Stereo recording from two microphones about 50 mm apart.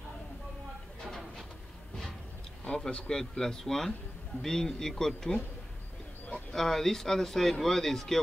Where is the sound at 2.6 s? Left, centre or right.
Centre.